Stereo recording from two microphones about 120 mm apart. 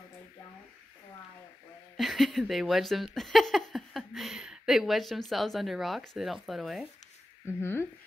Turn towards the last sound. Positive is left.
turn(degrees=20)  # may be behind; listen again after turning